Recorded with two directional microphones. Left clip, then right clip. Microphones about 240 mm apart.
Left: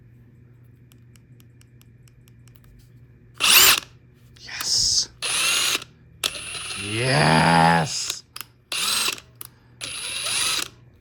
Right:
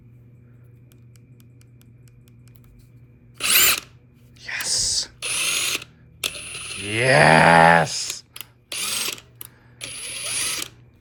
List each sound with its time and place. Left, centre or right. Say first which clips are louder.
3.4 s drill: left 4 dB; centre
4.4 s whispering: left 1 dB; centre
5.2 s drill: left 1 dB; centre
6.2 s mechanisms: left 1 dB; centre
6.9 s speech: right 5 dB; centre
8.7 s a sound: left 4 dB; centre